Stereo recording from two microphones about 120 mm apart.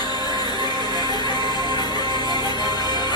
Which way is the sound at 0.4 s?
35° left (ahead or behind).